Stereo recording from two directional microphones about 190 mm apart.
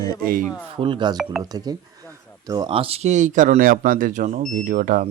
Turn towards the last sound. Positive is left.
turn(degrees=-45)  # may be behind; listen again after turning